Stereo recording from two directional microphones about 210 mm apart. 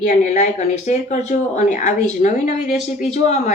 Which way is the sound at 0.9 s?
35° left (ahead or behind).